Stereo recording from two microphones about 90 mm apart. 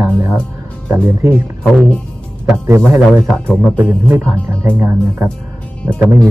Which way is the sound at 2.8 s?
20° right (ahead or behind).